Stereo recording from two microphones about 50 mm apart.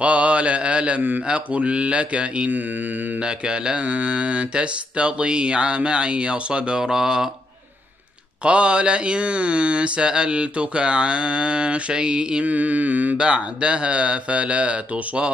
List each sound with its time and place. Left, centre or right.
0.0 s mantra: right
1.3 s speech: right
8.5 s speech: right
12.4 s mantra: right
13.2 s speech: right